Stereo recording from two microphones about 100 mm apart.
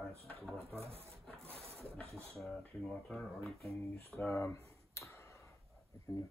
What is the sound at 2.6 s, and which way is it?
Speech, 10° left (ahead or behind).